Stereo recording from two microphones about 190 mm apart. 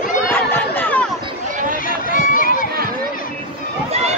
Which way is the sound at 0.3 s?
10° left (ahead or behind).